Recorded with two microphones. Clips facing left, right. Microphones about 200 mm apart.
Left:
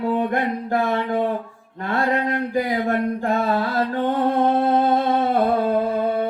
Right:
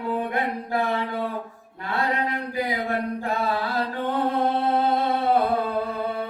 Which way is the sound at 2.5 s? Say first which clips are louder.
Left 6 dB; 45° left (ahead or behind).